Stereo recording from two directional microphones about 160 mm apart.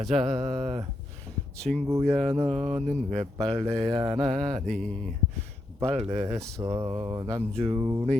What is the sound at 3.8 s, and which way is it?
Mantra, 25° right (ahead or behind).